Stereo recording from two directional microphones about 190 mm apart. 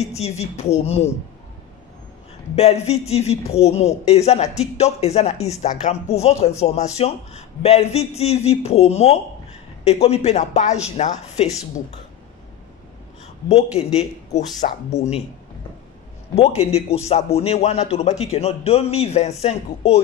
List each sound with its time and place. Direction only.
0.1 s speech: 35° left (ahead or behind)
2.5 s speech: 35° left (ahead or behind)
13.5 s speech: 35° left (ahead or behind)
16.3 s speech: 35° left (ahead or behind)